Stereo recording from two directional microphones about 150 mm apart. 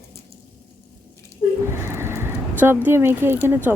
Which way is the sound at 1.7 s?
15° right (ahead or behind).